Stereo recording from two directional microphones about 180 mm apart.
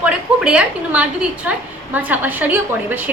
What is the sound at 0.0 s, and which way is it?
A woman's voice, 5° right (ahead or behind).